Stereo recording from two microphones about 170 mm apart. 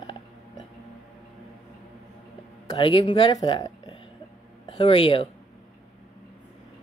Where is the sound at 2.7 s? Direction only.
30° left (ahead or behind).